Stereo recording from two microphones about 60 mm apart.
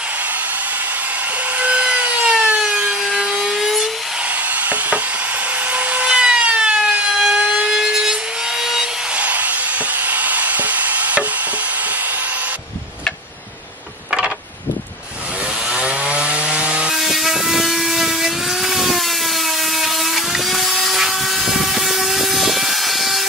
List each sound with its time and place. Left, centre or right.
1.6 s wood: right; by 3.9 s centre
4.6 s a sound: right
5.7 s wood: right
7.6 s sawing: centre
9.1 s a sound: right
15.7 s wood: centre